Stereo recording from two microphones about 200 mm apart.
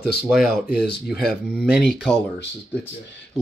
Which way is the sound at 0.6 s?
50° left (ahead or behind).